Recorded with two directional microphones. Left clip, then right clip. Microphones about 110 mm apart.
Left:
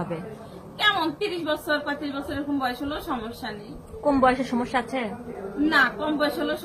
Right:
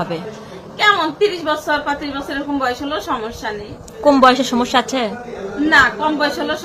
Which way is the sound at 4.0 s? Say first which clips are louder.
Right 10 dB; 30° right (ahead or behind).